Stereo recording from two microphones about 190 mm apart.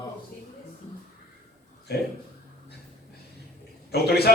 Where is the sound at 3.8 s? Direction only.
55° left (ahead or behind).